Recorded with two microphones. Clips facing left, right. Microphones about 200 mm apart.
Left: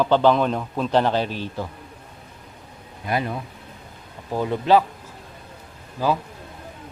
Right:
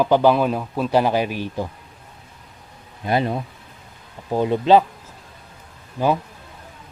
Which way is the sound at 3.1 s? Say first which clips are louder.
Right 4 dB; 30° right (ahead or behind).